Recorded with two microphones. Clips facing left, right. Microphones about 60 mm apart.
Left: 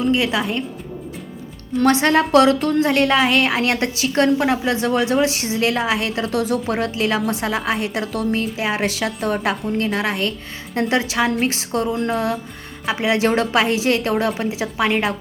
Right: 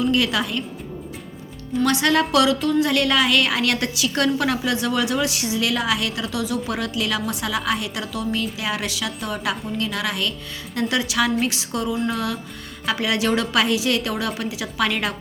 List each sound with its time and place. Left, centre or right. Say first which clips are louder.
0.0 s a woman's voice: left 2 dB; left
1.8 s a woman's voice: left 4 dB; left
2.8 s a woman's voice: left 3 dB; left